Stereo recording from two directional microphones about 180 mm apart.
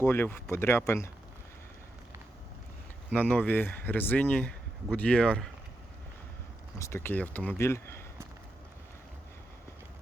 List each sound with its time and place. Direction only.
0.0 s speech: 10° left (ahead or behind)
3.1 s speech: 5° left (ahead or behind)
6.7 s speech: 15° left (ahead or behind)